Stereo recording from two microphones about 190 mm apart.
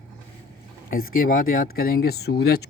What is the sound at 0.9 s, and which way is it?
Speech, 50° left (ahead or behind).